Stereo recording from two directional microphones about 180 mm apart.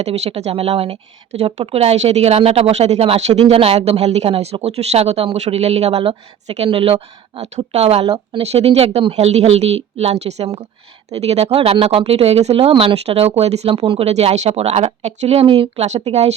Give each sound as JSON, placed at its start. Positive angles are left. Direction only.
{"t": 0.0, "sound": "speech", "side_deg": -35}